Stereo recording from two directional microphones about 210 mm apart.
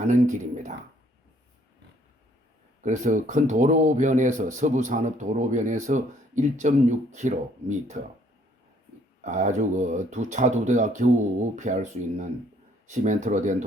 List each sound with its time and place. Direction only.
0.0 s a sound: 35° right (ahead or behind)
2.8 s speech: 35° right (ahead or behind)
9.2 s speech: 35° right (ahead or behind)